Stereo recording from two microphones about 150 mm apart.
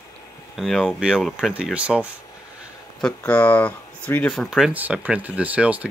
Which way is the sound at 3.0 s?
10° left (ahead or behind).